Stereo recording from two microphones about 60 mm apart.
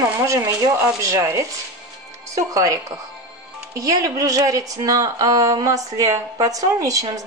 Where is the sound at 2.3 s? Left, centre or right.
Right.